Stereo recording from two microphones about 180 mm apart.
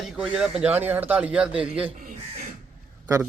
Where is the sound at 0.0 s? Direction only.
5° right (ahead or behind).